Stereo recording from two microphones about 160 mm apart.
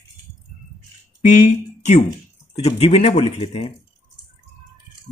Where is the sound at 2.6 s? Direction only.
40° left (ahead or behind).